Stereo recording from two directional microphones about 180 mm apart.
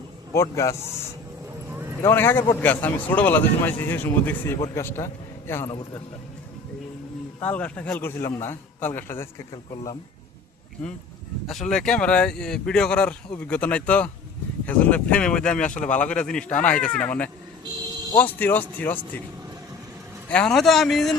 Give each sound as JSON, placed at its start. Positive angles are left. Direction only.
{"t": 0.3, "sound": "speech", "side_deg": 15}
{"t": 2.0, "sound": "a man's voice", "side_deg": 15}
{"t": 7.4, "sound": "speech", "side_deg": 5}
{"t": 11.7, "sound": "speech", "side_deg": 5}
{"t": 20.3, "sound": "speech", "side_deg": 5}